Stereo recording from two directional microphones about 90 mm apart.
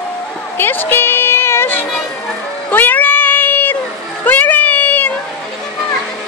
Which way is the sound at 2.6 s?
20° left (ahead or behind).